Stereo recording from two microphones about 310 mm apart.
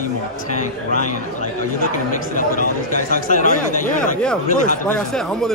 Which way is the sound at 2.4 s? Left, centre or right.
Left.